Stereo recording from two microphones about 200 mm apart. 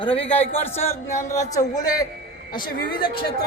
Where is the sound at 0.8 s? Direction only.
15° left (ahead or behind).